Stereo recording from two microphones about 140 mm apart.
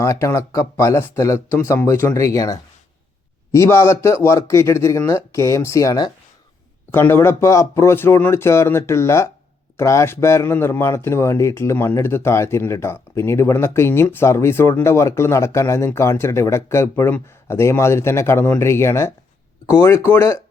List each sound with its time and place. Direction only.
0.0 s speech: 20° left (ahead or behind)